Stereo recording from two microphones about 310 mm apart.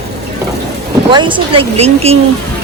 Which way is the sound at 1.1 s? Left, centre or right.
Centre.